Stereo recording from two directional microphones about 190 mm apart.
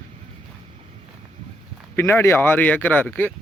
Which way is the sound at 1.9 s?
10° left (ahead or behind).